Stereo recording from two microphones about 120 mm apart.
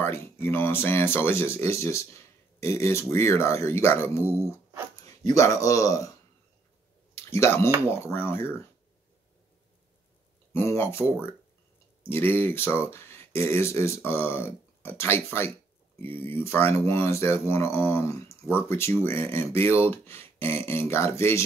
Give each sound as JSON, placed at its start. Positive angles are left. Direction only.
{"t": 0.0, "sound": "speech", "side_deg": 20}
{"t": 7.2, "sound": "speech", "side_deg": 20}
{"t": 10.5, "sound": "speech", "side_deg": 20}